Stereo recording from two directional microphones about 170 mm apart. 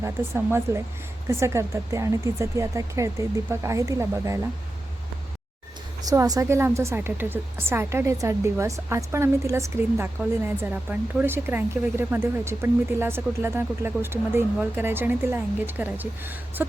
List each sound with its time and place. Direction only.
0.0 s speech: 15° right (ahead or behind)
6.0 s speech: 20° right (ahead or behind)